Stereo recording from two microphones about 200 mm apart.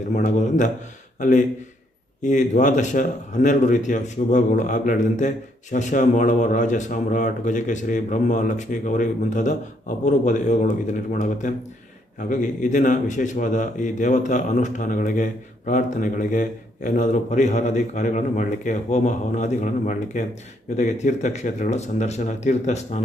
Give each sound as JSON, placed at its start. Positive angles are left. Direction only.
{"t": 0.1, "sound": "a man's voice", "side_deg": 40}